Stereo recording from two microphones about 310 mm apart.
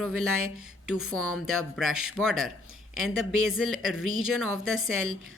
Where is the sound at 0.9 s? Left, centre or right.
Centre.